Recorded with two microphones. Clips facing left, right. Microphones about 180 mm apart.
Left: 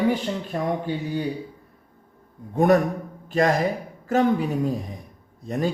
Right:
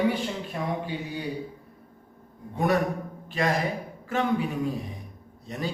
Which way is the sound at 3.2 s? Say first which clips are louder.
Left 6 dB; 45° left (ahead or behind).